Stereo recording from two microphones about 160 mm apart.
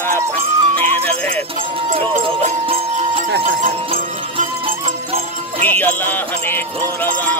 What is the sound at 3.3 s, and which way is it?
Speech, 60° right (ahead or behind).